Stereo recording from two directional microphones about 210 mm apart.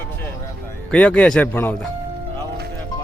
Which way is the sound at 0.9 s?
5° left (ahead or behind).